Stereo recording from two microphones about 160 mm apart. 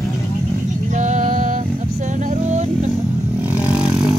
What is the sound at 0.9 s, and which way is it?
Music, 50° right (ahead or behind).